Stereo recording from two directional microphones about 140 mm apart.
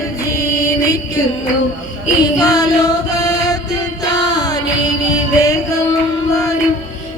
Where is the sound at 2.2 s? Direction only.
25° left (ahead or behind).